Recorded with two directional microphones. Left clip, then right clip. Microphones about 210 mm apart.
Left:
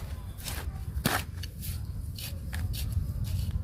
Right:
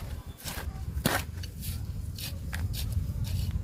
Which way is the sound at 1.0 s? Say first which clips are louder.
Even; 5° left (ahead or behind).